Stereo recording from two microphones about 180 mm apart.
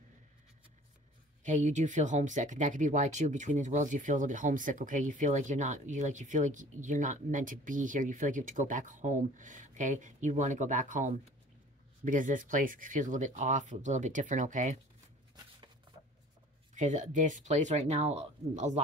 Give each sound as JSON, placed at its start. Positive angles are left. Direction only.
{"t": 1.4, "sound": "speech", "side_deg": -40}
{"t": 16.7, "sound": "speech", "side_deg": -45}